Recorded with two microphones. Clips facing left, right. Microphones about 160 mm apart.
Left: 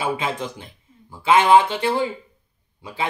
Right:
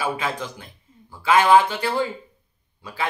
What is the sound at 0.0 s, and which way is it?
Speech, 20° left (ahead or behind).